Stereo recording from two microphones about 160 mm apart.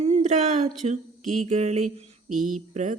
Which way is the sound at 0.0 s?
45° right (ahead or behind).